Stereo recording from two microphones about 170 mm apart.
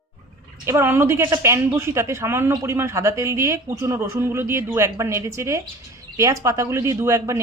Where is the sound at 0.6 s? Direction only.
15° right (ahead or behind).